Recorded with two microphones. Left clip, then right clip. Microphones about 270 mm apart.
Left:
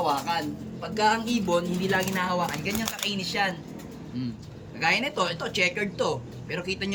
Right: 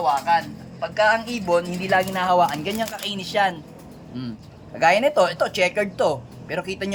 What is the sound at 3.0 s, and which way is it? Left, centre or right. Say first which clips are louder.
Speech: right 1 dB; right.